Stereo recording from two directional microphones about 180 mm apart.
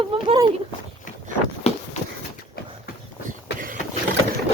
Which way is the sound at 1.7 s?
35° left (ahead or behind).